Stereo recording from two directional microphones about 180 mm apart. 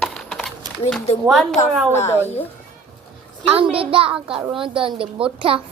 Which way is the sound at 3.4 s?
30° right (ahead or behind).